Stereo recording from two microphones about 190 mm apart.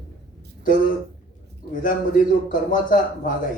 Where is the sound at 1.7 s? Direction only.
45° left (ahead or behind).